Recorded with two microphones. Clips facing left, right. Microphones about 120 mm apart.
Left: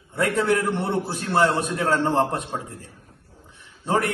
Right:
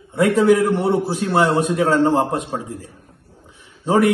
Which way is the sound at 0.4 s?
15° right (ahead or behind).